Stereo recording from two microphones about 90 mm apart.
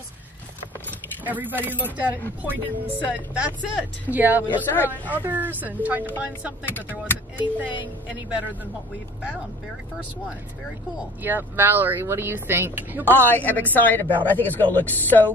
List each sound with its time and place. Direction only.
1.2 s speech: 20° right (ahead or behind)
6.7 s a woman's voice: 20° left (ahead or behind)
7.3 s speech: 20° right (ahead or behind)
11.2 s speech: 20° right (ahead or behind)
13.2 s a woman's voice: 20° left (ahead or behind)